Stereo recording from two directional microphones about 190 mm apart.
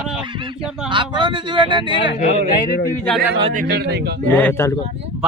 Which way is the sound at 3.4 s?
35° right (ahead or behind).